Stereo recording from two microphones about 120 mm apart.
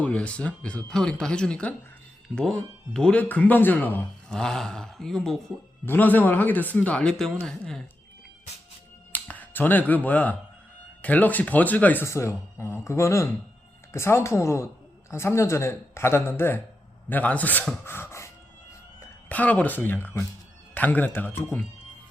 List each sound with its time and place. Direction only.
0.0 s speech: 10° left (ahead or behind)
4.3 s speech: 5° left (ahead or behind)
5.8 s speech: 15° left (ahead or behind)
9.1 s a man's voice: 15° left (ahead or behind)
19.3 s speech: 15° left (ahead or behind)